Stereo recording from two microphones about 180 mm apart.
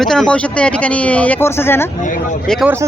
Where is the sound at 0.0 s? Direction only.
5° left (ahead or behind).